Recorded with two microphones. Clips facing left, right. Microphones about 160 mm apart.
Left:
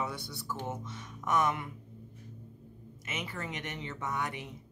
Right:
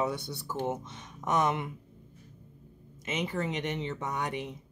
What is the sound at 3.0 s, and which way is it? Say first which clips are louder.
Speech: right 7 dB; 20° right (ahead or behind).